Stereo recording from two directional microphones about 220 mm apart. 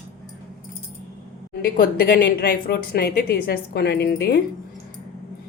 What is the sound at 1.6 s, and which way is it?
Speech, 40° left (ahead or behind).